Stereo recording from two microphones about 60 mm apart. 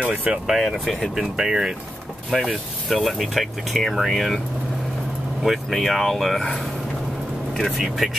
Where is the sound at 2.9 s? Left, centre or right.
Centre.